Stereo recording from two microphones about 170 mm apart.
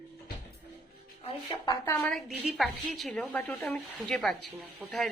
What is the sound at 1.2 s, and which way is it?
Speech, 30° left (ahead or behind).